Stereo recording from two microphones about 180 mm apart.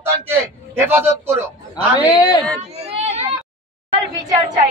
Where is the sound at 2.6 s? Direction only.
35° right (ahead or behind).